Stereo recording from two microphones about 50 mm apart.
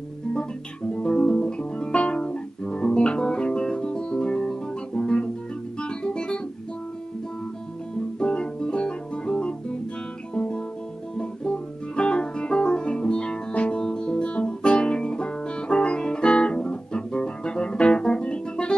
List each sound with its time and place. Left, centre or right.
0.3 s music: centre
8.2 s music: centre
10.3 s guitar: centre
11.1 s music: centre